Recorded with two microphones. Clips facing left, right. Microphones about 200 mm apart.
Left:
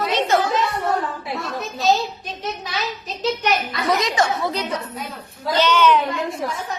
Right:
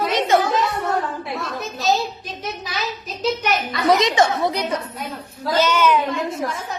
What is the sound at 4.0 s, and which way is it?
A woman's voice, 20° right (ahead or behind).